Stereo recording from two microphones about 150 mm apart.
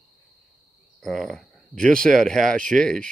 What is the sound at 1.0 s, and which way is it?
Speech, centre (ahead or behind).